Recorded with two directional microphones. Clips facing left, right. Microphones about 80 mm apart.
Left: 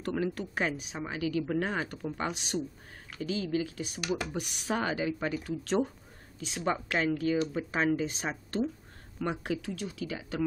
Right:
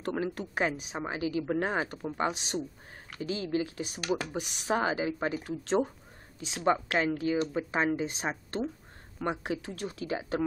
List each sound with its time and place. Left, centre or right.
0.0 s speech: right
4.1 s speech: right
6.6 s speech: right
9.8 s speech: right